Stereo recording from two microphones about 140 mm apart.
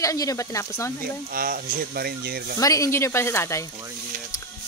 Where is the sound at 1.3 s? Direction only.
90° right.